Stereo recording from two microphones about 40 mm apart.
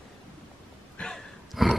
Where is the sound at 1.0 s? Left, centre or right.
Left.